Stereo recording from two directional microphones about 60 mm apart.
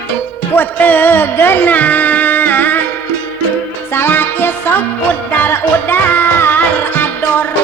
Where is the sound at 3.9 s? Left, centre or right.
Left.